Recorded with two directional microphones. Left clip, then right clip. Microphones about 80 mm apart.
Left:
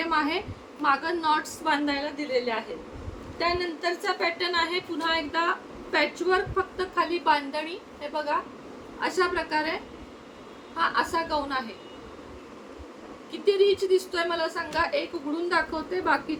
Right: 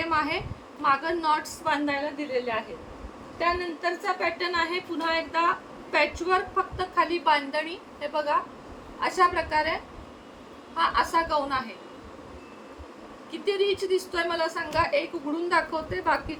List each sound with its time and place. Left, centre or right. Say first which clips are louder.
0.0 s a woman's voice: even; centre
13.3 s a woman's voice: left 4 dB; centre